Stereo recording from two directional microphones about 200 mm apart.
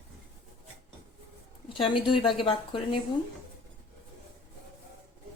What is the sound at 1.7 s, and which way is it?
A woman's voice, 25° left (ahead or behind).